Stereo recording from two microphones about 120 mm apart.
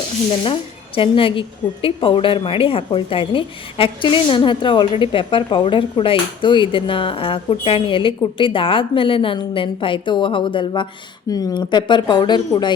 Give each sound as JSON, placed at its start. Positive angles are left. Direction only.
{"t": 0.4, "sound": "a woman's voice", "side_deg": 50}
{"t": 11.3, "sound": "speech", "side_deg": 30}